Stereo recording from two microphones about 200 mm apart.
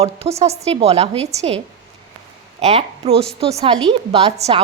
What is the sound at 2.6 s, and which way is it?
A woman's voice, 30° right (ahead or behind).